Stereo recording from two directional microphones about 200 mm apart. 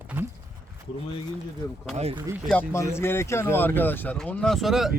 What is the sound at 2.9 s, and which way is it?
Speech, 10° left (ahead or behind).